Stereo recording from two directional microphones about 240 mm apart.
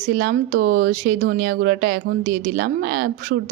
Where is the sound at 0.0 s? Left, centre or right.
Right.